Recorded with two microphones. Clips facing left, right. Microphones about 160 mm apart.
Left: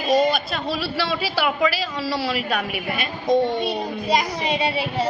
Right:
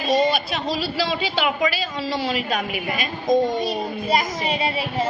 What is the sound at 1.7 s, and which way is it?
Speech, 90° left.